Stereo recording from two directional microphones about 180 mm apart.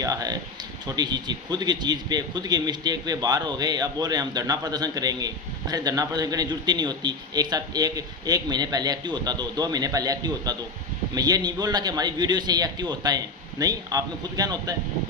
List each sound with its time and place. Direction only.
0.0 s a man's voice: 20° right (ahead or behind)